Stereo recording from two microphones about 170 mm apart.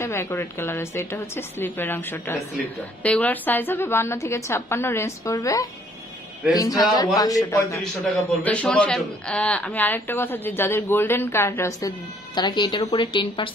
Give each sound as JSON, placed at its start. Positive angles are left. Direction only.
{"t": 0.0, "sound": "a man's voice", "side_deg": 15}
{"t": 7.8, "sound": "a man's voice", "side_deg": 5}
{"t": 12.4, "sound": "speech", "side_deg": 25}